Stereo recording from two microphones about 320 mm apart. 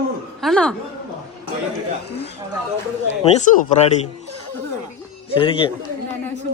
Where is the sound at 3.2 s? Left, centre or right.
Centre.